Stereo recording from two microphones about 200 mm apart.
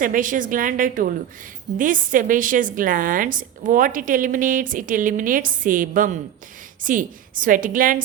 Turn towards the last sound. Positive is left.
turn(degrees=-45)  # may be behind; listen again after turning